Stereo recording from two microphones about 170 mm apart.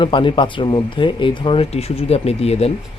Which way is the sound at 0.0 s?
30° left (ahead or behind).